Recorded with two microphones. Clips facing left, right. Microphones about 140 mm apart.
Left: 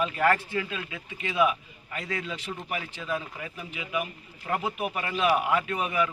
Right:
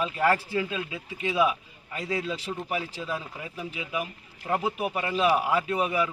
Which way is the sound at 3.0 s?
10° right (ahead or behind).